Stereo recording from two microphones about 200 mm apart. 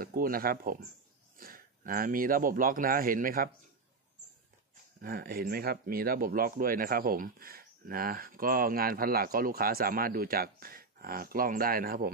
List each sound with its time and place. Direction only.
0.0 s speech: 45° right (ahead or behind)
5.0 s speech: 50° right (ahead or behind)